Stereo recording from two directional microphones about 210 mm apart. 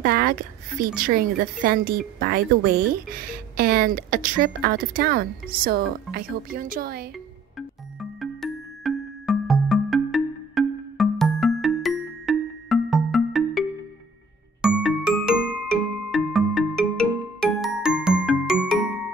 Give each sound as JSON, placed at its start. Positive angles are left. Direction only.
{"t": 0.0, "sound": "a woman's voice", "side_deg": -45}
{"t": 7.5, "sound": "music", "side_deg": 0}